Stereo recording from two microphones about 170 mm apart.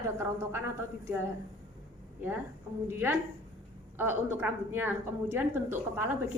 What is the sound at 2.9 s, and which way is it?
A woman's voice, 10° right (ahead or behind).